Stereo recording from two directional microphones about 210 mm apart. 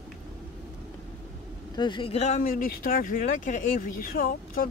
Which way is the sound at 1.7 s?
20° left (ahead or behind).